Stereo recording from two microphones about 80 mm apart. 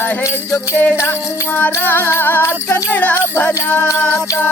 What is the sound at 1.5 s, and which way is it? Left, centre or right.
Music, left.